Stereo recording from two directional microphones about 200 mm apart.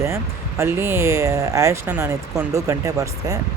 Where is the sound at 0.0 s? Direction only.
15° right (ahead or behind).